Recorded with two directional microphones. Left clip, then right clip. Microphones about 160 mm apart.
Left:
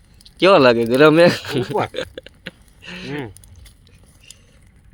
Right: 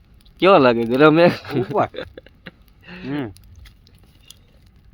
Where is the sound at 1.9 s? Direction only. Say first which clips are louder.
Left 5 dB; 15° left (ahead or behind).